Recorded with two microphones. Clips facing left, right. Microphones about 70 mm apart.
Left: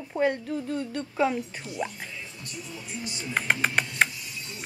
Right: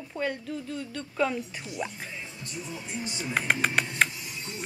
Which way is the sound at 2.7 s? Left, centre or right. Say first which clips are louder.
Right 1 dB; right.